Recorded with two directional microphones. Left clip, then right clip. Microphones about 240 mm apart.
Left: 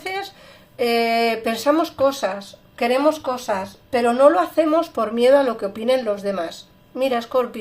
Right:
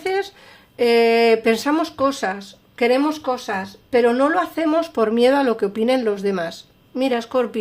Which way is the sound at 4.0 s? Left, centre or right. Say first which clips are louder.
Left 3 dB; right.